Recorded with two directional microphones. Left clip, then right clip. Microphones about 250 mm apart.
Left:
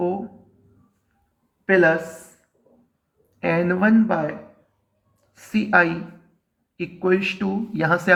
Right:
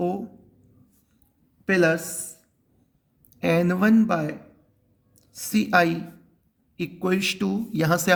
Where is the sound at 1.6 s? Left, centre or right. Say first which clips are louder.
Left 4 dB; right.